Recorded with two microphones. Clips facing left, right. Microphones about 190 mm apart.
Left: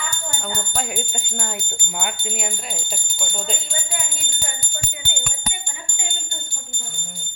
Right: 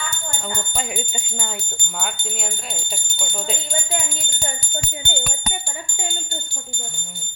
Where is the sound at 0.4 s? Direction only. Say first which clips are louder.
Even; centre (ahead or behind).